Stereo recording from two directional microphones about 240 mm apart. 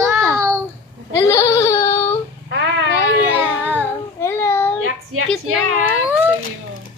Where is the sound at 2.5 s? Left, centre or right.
Right.